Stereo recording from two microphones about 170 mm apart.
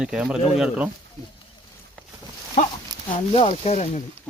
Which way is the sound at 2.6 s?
45° left (ahead or behind).